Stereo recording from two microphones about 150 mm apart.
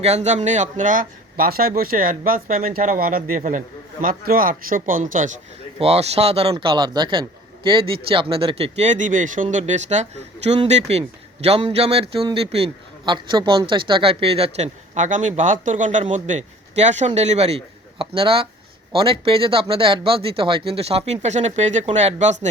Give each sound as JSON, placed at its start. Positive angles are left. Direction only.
{"t": 0.0, "sound": "a man's voice", "side_deg": -45}
{"t": 5.8, "sound": "speech", "side_deg": -45}
{"t": 6.5, "sound": "a man's voice", "side_deg": -30}